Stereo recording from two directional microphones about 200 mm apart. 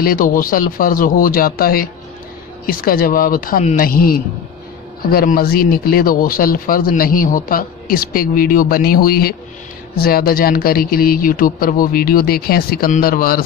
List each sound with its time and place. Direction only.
0.0 s speech: 45° left (ahead or behind)